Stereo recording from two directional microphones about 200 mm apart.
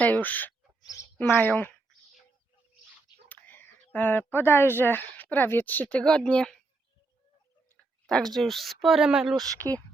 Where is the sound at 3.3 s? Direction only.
10° left (ahead or behind).